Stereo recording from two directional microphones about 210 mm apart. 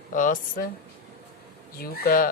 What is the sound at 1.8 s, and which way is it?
Speech, 45° left (ahead or behind).